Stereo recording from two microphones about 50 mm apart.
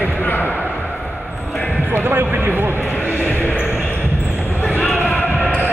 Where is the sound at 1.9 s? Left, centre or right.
Right.